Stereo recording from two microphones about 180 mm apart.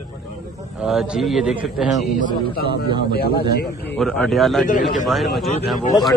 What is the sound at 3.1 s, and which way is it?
Speech, 60° left (ahead or behind).